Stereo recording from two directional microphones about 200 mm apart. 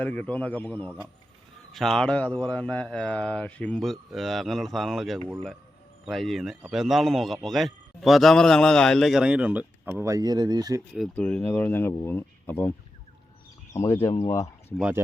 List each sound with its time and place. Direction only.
0.0 s speech: 5° left (ahead or behind); by 10.8 s 20° right (ahead or behind)
10.9 s speech: 5° left (ahead or behind)
13.7 s speech: 15° left (ahead or behind)
14.8 s speech: 5° right (ahead or behind)